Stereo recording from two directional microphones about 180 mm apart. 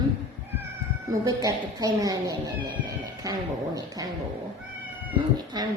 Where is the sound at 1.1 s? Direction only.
20° right (ahead or behind).